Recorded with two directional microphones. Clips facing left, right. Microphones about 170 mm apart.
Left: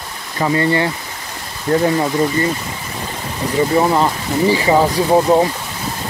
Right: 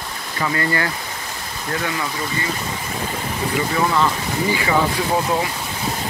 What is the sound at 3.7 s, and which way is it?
Speech, 35° left (ahead or behind).